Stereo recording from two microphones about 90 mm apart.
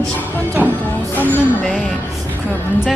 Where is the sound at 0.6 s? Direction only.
20° right (ahead or behind).